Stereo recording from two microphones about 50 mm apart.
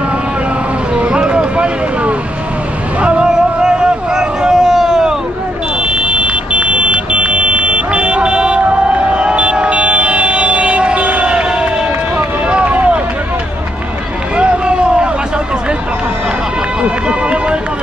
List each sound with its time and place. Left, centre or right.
0.9 s a sound: right
5.8 s vehicle: centre
12.4 s run: right
14.3 s run: right
16.8 s run: right